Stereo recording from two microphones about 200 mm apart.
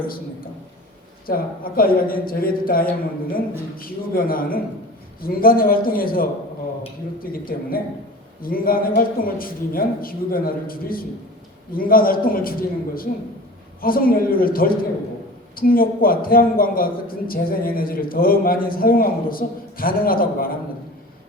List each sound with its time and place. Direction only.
1.3 s a man's voice: 45° left (ahead or behind)